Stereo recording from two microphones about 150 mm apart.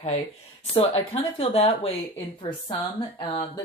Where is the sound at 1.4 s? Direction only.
40° left (ahead or behind).